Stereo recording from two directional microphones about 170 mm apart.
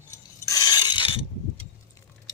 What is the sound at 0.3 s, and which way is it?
Filing, 20° left (ahead or behind).